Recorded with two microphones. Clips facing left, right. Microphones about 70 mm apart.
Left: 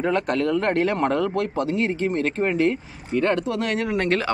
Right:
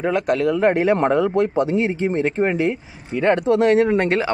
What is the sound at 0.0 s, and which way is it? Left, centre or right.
A man's voice, centre.